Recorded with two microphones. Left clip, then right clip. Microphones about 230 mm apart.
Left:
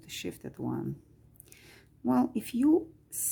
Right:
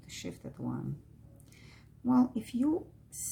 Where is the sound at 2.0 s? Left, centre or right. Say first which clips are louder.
Left 1 dB; left.